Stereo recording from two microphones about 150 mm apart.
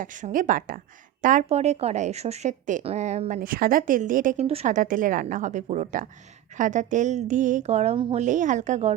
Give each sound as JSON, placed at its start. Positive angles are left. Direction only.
{"t": 0.0, "sound": "a woman's voice", "side_deg": -60}
{"t": 4.4, "sound": "speech", "side_deg": -40}
{"t": 4.7, "sound": "a woman's voice", "side_deg": -60}
{"t": 8.2, "sound": "speech", "side_deg": -55}